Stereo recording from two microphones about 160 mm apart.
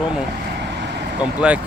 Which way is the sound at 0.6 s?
90° right.